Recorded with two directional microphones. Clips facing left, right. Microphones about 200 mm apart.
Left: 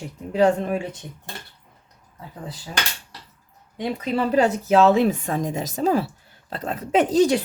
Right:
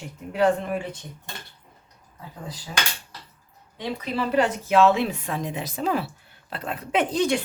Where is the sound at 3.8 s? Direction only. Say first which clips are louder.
Left 4 dB; 40° left (ahead or behind).